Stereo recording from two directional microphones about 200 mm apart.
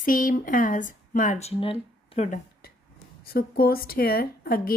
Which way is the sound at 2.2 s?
45° left (ahead or behind).